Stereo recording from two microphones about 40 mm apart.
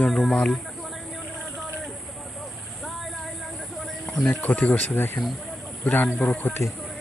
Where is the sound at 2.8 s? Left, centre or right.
Centre.